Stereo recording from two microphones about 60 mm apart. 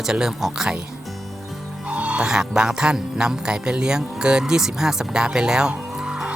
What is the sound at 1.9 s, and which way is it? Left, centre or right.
Music, centre.